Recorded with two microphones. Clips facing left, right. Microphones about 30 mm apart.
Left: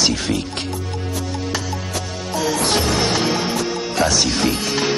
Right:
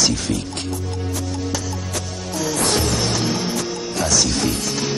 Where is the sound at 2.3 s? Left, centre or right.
Left.